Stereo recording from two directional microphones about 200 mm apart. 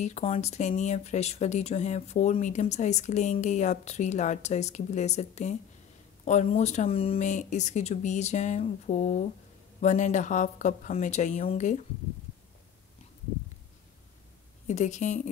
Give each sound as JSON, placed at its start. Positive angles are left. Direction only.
{"t": 0.0, "sound": "speech", "side_deg": 30}
{"t": 14.7, "sound": "speech", "side_deg": 35}